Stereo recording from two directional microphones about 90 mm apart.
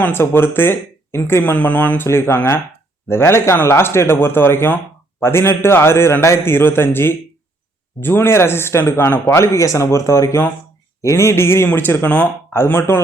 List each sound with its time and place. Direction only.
0.0 s speech: 25° left (ahead or behind)